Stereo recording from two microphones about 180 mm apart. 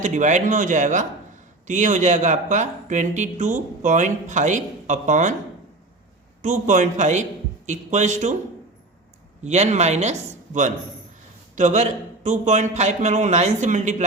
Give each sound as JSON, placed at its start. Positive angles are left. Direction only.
{"t": 0.0, "sound": "speech", "side_deg": -40}
{"t": 6.4, "sound": "a man's voice", "side_deg": -45}
{"t": 9.4, "sound": "a man's voice", "side_deg": -40}